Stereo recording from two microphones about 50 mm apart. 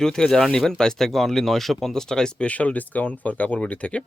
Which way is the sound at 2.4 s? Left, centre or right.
Left.